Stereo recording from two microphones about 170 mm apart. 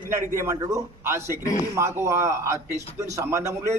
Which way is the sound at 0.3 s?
20° right (ahead or behind).